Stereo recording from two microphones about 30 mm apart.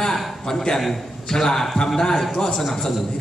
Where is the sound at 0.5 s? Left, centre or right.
Centre.